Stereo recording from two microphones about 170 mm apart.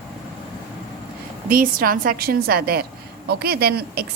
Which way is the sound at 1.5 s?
55° right (ahead or behind).